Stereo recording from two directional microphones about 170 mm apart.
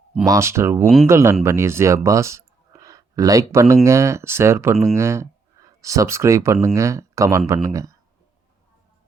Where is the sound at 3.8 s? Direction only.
15° right (ahead or behind).